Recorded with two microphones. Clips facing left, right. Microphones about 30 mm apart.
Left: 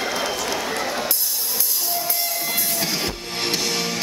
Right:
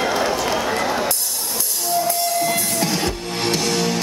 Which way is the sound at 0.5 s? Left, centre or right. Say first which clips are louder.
Right 4 dB; centre.